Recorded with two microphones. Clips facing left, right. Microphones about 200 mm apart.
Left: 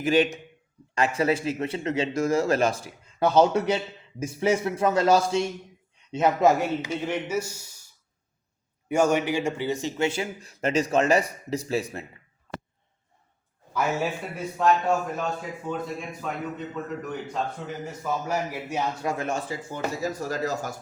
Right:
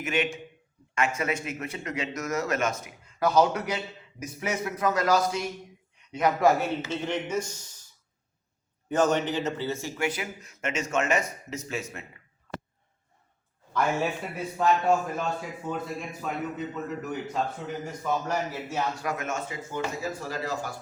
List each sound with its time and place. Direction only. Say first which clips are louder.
0.0 s speech: left 7 dB; 35° left (ahead or behind); by 7.9 s 10° left (ahead or behind)
8.9 s speech: left 2 dB; 10° left (ahead or behind); by 12.0 s 35° left (ahead or behind)
13.7 s a man's voice: even; centre (ahead or behind)
19.0 s speech: left 3 dB; 30° left (ahead or behind)